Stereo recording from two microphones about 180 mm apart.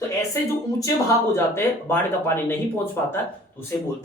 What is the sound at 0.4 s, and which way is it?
Speech, 15° left (ahead or behind).